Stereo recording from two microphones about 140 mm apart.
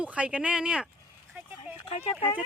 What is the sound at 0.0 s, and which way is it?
Speech, 10° right (ahead or behind).